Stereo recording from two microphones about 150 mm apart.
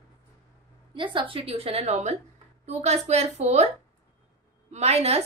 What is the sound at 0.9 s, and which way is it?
A woman's voice, 35° right (ahead or behind).